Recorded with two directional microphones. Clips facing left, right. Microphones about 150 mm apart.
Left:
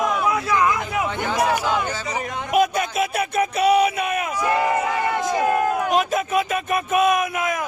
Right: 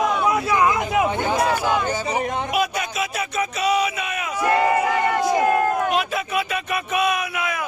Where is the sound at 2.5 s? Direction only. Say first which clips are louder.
Left 8 dB; 50° left (ahead or behind).